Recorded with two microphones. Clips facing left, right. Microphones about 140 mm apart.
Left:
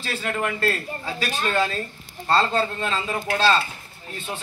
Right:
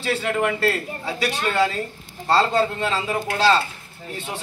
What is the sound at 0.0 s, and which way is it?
A man's voice, 15° right (ahead or behind).